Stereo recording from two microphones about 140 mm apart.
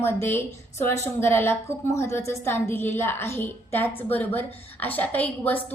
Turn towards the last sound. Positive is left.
turn(degrees=10)  # may be behind; listen again after turning